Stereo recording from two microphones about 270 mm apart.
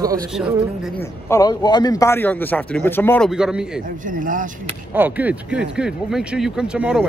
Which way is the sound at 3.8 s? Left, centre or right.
Right.